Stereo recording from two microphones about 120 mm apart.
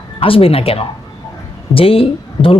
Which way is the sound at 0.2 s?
50° left (ahead or behind).